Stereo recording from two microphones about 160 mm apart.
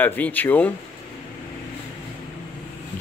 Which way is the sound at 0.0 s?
10° left (ahead or behind).